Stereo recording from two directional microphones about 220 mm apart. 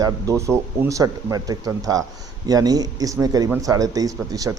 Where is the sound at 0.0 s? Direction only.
15° right (ahead or behind).